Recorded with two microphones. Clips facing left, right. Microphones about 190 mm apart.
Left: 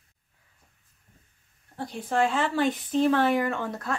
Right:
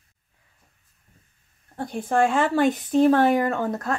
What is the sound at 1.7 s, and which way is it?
Speech, 50° right (ahead or behind).